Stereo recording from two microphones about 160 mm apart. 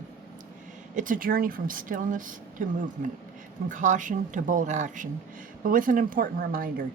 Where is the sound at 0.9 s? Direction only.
55° right (ahead or behind).